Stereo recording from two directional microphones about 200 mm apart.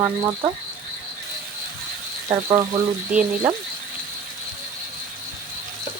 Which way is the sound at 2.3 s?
15° right (ahead or behind).